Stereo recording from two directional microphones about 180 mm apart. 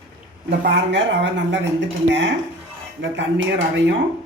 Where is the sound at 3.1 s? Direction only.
90° right.